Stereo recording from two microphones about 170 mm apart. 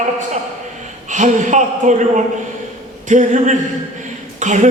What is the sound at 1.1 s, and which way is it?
A woman's voice, 45° right (ahead or behind).